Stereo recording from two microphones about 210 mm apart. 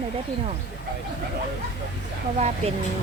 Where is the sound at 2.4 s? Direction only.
30° right (ahead or behind).